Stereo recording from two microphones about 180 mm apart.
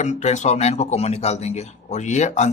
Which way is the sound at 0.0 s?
40° left (ahead or behind).